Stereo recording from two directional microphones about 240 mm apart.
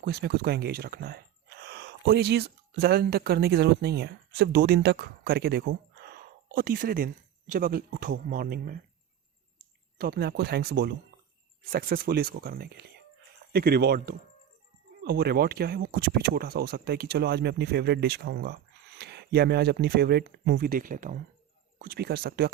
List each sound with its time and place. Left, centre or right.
0.0 s speech: right